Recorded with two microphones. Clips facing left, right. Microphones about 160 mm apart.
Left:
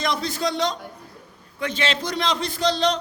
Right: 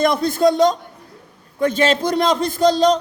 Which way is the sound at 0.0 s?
50° right (ahead or behind).